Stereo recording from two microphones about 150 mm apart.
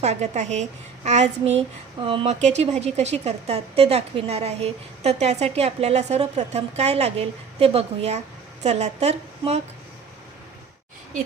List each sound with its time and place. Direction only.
0.0 s a child's voice: 50° right (ahead or behind)